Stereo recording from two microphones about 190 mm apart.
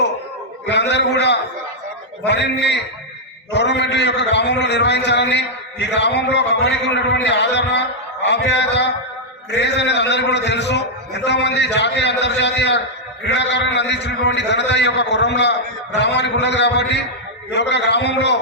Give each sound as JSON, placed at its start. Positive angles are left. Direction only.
{"t": 0.6, "sound": "a man's voice", "side_deg": 65}